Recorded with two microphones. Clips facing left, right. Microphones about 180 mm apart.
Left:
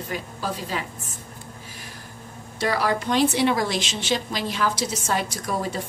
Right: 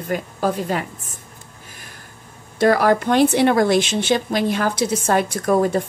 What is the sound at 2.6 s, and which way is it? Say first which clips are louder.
Speech: right 8 dB; 55° right (ahead or behind).